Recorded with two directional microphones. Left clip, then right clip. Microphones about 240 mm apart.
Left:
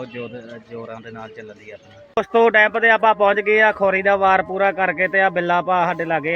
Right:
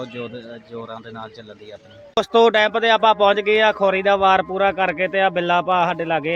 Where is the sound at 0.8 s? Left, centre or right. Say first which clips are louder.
Even; centre.